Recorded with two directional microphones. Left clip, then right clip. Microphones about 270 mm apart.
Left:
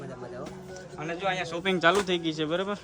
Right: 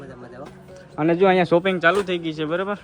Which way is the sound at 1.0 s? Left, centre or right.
Centre.